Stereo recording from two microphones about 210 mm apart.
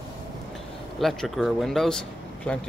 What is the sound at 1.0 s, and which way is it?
Speech, centre (ahead or behind).